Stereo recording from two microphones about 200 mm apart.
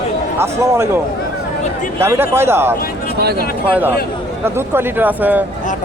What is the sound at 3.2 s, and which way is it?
Speech, 50° right (ahead or behind).